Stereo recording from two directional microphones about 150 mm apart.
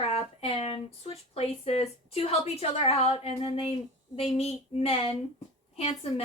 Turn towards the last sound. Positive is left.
turn(degrees=45)  # may be behind; listen again after turning